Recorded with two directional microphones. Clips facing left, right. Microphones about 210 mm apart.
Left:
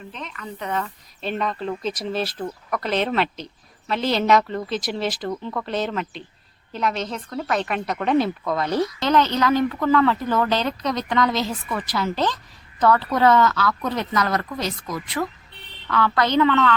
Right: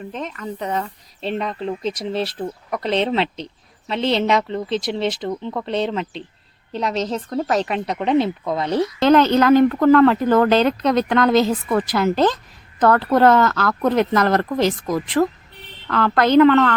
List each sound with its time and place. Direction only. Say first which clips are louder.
0.1 s speech: right 7 dB; 50° right (ahead or behind)
0.7 s speech: right 2 dB; 35° right (ahead or behind)
9.0 s speech: right 8 dB; 55° right (ahead or behind)